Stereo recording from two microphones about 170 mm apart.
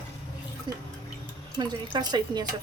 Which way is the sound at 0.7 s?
25° right (ahead or behind).